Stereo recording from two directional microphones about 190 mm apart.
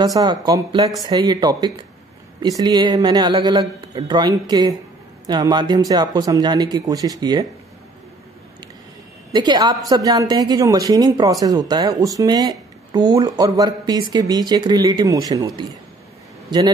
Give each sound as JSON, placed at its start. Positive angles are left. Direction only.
{"t": 0.0, "sound": "speech", "side_deg": -20}
{"t": 9.3, "sound": "a man's voice", "side_deg": -25}